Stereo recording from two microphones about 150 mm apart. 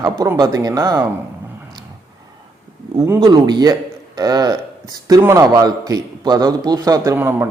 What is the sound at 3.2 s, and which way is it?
Speech, 30° right (ahead or behind).